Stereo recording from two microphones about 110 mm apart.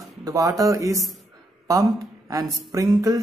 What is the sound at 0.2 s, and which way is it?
A man's voice, 35° right (ahead or behind).